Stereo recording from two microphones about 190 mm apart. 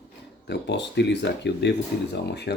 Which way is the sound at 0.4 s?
65° left (ahead or behind).